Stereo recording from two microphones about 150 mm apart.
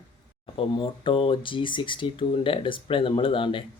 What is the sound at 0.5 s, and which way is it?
Speech, 35° left (ahead or behind).